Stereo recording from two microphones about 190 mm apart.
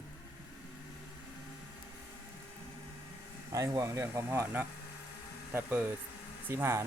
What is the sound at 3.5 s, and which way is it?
Speech, 15° right (ahead or behind).